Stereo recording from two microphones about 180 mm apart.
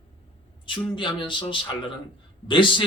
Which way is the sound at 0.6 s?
25° left (ahead or behind).